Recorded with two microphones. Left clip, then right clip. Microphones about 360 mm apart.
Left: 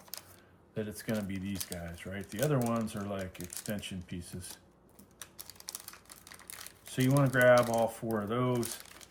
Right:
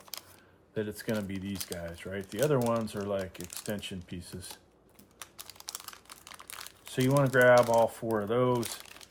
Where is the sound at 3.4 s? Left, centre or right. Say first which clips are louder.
Right 3 dB; centre.